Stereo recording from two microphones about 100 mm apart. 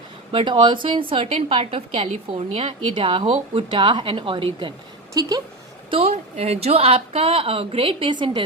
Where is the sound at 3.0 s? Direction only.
60° right (ahead or behind).